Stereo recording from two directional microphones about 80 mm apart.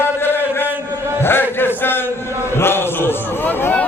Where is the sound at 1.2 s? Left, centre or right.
Left.